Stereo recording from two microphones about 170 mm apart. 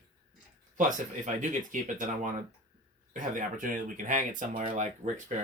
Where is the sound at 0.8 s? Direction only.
50° right (ahead or behind).